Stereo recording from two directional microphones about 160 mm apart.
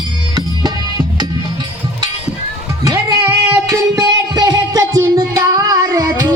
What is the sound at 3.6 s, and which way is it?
Music, 20° right (ahead or behind).